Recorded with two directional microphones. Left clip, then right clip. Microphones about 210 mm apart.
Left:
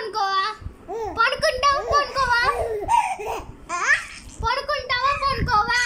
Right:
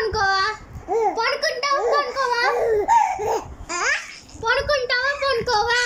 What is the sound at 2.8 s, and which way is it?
Laughter, 5° right (ahead or behind).